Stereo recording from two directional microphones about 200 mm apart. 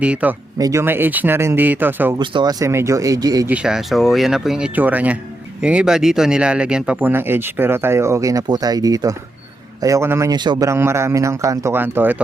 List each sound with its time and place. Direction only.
0.0 s speech: 5° right (ahead or behind)
2.1 s speech: 20° right (ahead or behind)
3.5 s speech: 5° right (ahead or behind)